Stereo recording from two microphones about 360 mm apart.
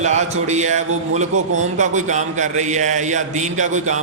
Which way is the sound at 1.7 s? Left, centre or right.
Centre.